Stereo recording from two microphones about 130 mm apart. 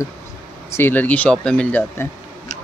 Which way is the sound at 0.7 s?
15° left (ahead or behind).